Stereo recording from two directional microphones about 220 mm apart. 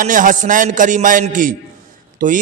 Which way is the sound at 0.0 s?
35° right (ahead or behind).